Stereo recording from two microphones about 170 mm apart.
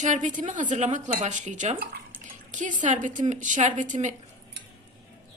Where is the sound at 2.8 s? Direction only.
45° right (ahead or behind).